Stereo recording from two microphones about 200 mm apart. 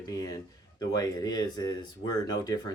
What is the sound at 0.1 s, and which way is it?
Speech, 20° left (ahead or behind).